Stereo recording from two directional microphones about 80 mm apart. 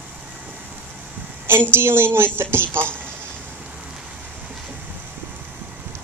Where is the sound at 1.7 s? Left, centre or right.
Right.